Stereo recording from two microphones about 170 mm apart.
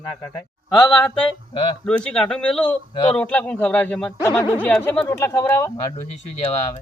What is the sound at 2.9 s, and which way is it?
Speech, 30° left (ahead or behind).